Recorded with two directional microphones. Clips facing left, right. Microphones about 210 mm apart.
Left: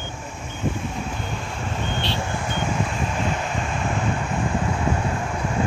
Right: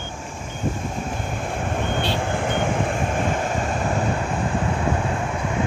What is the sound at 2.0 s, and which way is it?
Vehicle, 55° right (ahead or behind).